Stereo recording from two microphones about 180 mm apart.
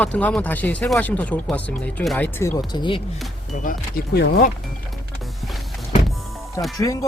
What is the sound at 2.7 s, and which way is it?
Speech, 25° left (ahead or behind).